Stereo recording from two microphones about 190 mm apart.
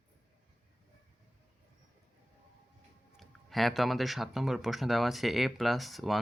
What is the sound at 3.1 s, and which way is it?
Speech, centre (ahead or behind).